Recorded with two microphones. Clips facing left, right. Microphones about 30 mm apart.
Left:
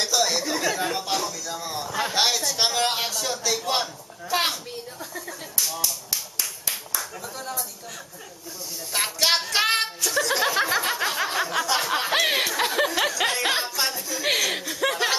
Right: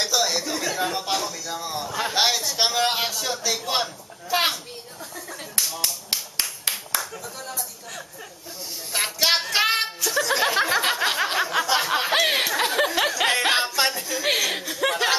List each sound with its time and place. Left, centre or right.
0.0 s chatter: centre
0.7 s speech: centre
7.0 s speech: centre
8.9 s music: centre
10.5 s speech: centre
11.0 s snicker: centre
11.3 s speech: centre
13.6 s speech: right
14.2 s music: centre